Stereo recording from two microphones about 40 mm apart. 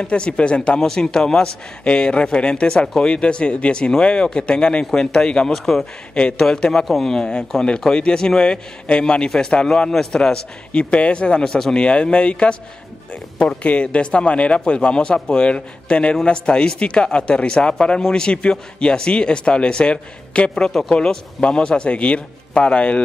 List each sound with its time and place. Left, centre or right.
0.0 s speech: left
0.7 s speech: centre
1.9 s speech: left
5.5 s speech: centre
6.3 s speech: centre
6.9 s speech: centre
7.2 s speech: centre